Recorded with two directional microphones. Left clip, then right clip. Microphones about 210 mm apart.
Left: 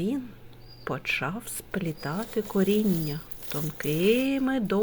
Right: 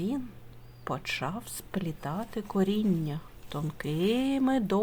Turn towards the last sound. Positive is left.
turn(degrees=-10)  # may be behind; listen again after turning